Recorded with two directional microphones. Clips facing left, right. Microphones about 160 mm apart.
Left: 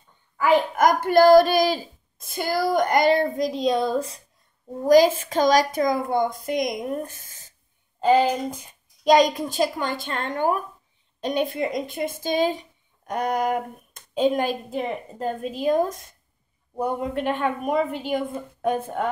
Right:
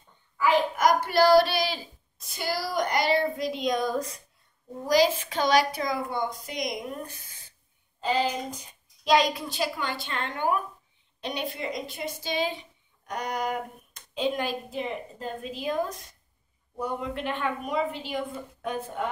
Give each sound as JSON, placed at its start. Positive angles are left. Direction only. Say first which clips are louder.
{"t": 0.4, "sound": "a child's voice", "louder": "left 4 dB", "side_deg": 50}
{"t": 4.8, "sound": "speech", "louder": "left 7 dB", "side_deg": 50}